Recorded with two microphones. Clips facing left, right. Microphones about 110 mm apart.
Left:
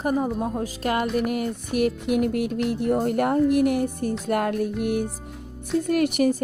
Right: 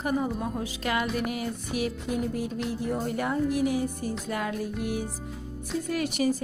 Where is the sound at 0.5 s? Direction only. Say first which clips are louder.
Left 4 dB; 45° left (ahead or behind).